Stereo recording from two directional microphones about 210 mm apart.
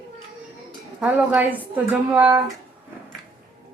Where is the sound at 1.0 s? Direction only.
5° right (ahead or behind).